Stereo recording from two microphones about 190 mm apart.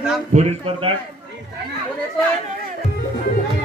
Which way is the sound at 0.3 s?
35° right (ahead or behind).